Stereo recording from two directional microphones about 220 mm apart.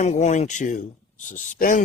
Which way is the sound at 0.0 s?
30° left (ahead or behind).